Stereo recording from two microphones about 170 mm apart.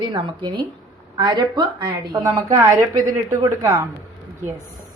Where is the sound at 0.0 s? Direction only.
25° right (ahead or behind).